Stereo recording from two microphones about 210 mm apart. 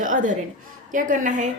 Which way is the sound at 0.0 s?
40° right (ahead or behind).